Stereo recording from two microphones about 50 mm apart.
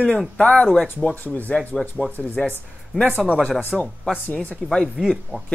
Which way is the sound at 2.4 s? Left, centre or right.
Centre.